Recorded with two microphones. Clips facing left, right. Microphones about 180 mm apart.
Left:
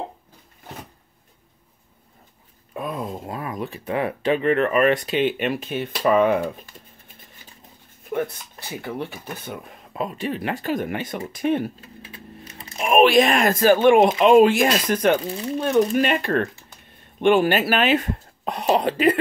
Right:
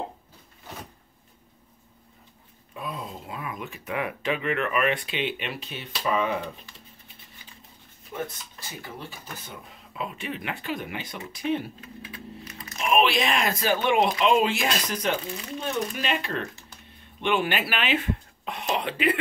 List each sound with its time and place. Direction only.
2.7 s speech: 50° left (ahead or behind)
8.0 s speech: 60° left (ahead or behind)
9.9 s speech: 40° left (ahead or behind)
11.8 s computer keyboard: 30° left (ahead or behind)
12.8 s speech: 50° left (ahead or behind)